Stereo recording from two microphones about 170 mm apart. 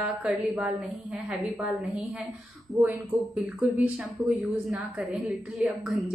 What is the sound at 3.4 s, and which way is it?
A woman's voice, 5° right (ahead or behind).